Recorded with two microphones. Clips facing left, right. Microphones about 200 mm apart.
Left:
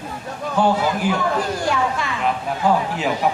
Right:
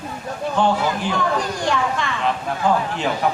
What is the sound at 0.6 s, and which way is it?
A man's voice, 5° left (ahead or behind).